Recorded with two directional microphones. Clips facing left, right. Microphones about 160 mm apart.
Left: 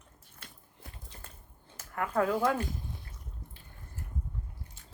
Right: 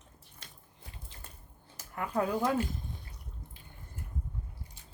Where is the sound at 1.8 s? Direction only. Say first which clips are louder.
Left 2 dB; 20° right (ahead or behind).